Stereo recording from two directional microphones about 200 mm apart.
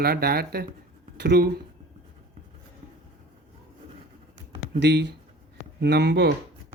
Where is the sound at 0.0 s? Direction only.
50° right (ahead or behind).